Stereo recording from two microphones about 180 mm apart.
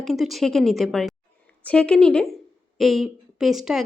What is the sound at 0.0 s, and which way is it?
A woman's voice, centre (ahead or behind).